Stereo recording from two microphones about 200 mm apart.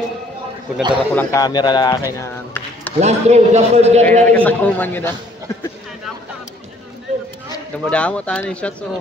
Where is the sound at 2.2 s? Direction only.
10° left (ahead or behind).